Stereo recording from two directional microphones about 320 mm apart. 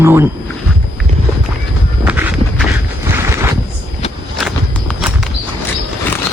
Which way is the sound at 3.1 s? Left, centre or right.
Centre.